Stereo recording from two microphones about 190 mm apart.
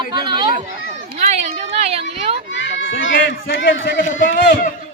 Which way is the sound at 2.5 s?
80° left.